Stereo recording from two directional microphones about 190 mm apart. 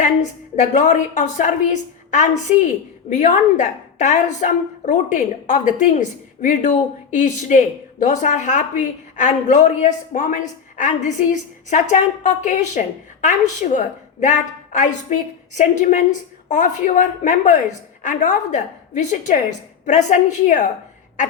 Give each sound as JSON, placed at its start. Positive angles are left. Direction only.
{"t": 0.0, "sound": "a woman's voice", "side_deg": 40}